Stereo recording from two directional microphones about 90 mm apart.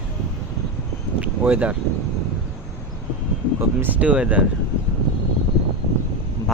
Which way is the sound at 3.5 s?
20° right (ahead or behind).